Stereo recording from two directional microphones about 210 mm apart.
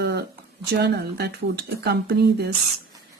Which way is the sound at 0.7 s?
50° right (ahead or behind).